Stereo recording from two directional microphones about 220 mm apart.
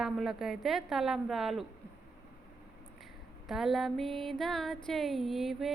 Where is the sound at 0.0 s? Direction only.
Centre (ahead or behind).